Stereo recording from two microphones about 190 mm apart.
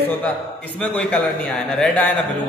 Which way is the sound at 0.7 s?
5° left (ahead or behind).